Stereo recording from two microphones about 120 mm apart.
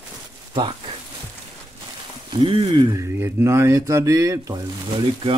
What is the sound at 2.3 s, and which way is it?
Speech, 45° right (ahead or behind).